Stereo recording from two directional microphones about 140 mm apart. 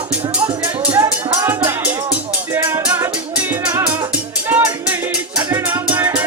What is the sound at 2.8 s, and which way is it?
Music, 10° right (ahead or behind).